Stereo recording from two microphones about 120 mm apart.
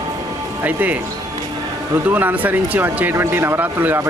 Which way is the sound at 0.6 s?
15° right (ahead or behind).